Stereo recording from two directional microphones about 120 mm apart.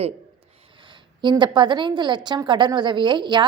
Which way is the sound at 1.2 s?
40° right (ahead or behind).